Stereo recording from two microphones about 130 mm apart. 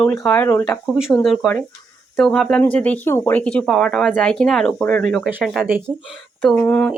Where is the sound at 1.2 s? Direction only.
Centre (ahead or behind).